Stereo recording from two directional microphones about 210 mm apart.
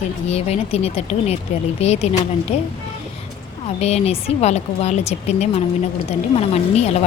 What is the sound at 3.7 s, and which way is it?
A woman's voice, 30° left (ahead or behind).